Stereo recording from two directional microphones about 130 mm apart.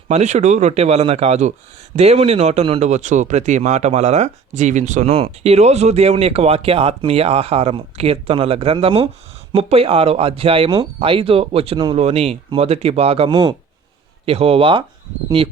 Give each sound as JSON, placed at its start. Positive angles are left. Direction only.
{"t": 0.1, "sound": "speech", "side_deg": -60}
{"t": 13.3, "sound": "speech", "side_deg": -35}
{"t": 14.3, "sound": "speech", "side_deg": -50}